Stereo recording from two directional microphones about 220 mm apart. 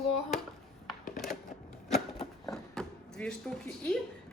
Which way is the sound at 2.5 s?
5° left (ahead or behind).